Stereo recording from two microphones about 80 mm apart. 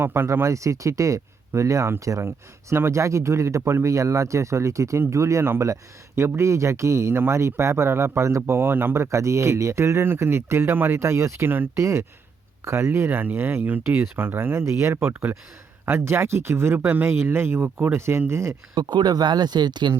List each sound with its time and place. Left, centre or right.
0.0 s speech: right
18.7 s speech: right